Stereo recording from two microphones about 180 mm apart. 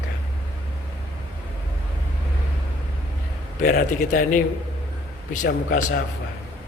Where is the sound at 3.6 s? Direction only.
50° left (ahead or behind).